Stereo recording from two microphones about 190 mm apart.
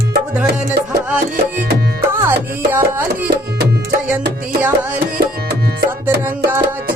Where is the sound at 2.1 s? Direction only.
10° right (ahead or behind).